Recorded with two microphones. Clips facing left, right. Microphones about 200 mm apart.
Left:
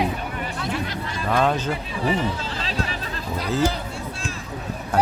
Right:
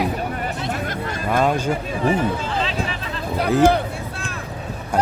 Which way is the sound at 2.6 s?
40° left (ahead or behind).